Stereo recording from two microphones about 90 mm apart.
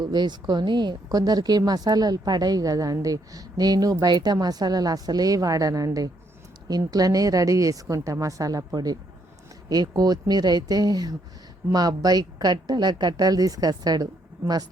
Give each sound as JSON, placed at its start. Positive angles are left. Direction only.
{"t": 0.0, "sound": "a woman's voice", "side_deg": -50}